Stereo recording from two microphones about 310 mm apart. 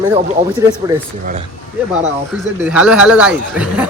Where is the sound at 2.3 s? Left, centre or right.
Centre.